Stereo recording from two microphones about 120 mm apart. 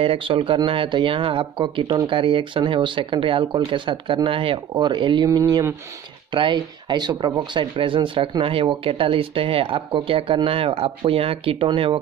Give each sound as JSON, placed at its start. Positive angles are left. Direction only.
{"t": 0.0, "sound": "speech", "side_deg": -45}
{"t": 6.3, "sound": "speech", "side_deg": -40}